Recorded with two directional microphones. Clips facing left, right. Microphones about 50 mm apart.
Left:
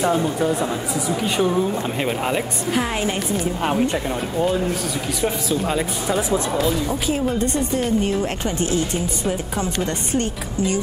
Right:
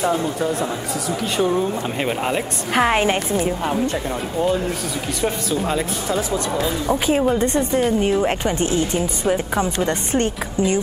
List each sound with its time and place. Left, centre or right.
0.0 s speech: centre
1.4 s speech: centre
2.8 s a woman's voice: right
3.9 s speech: centre
6.9 s a woman's voice: right
7.8 s speech: centre
8.2 s a woman's voice: right